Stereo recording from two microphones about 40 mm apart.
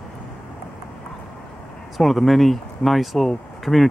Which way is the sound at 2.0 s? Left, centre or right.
Centre.